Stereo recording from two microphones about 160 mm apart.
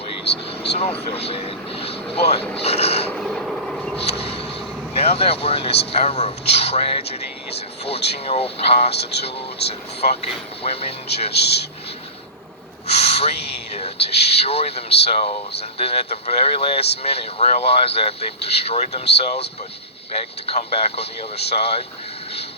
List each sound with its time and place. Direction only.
0.3 s vehicle: 90° left
0.8 s speech: 40° left (ahead or behind)
3.1 s vehicle: centre (ahead or behind)
4.1 s speech: 40° left (ahead or behind)
8.9 s speech: 90° left
9.6 s speech: 40° left (ahead or behind)
11.3 s speech: 90° left
12.9 s speech: 40° left (ahead or behind)
20.1 s speech: 40° left (ahead or behind)